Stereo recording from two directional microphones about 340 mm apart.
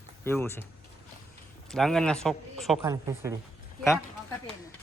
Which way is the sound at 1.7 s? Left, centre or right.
Centre.